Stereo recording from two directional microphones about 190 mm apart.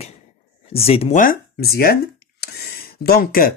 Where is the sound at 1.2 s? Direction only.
50° left (ahead or behind).